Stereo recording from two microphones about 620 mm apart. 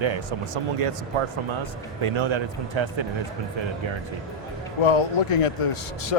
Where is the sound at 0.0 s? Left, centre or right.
Right.